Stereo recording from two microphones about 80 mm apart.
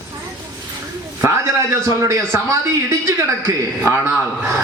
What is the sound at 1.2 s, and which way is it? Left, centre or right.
A man's voice, right.